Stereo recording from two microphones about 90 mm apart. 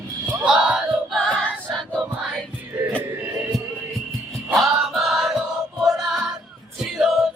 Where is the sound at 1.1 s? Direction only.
10° left (ahead or behind).